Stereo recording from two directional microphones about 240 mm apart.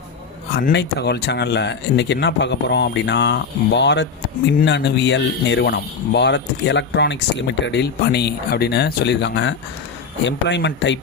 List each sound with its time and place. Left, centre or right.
0.7 s speech: left